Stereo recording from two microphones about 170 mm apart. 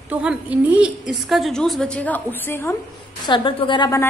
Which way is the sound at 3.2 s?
30° left (ahead or behind).